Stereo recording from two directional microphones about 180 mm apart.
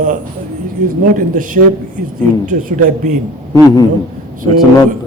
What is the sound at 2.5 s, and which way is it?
Speech, 45° right (ahead or behind).